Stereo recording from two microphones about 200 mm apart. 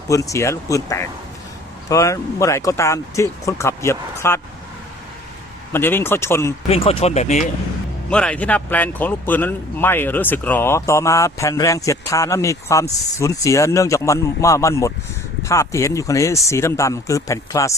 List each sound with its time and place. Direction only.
0.1 s speech: 15° left (ahead or behind)
5.7 s speech: 10° left (ahead or behind)
6.7 s speech: 30° left (ahead or behind)
8.1 s speech: 5° left (ahead or behind)